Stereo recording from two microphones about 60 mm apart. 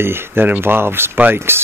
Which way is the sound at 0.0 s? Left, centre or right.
Right.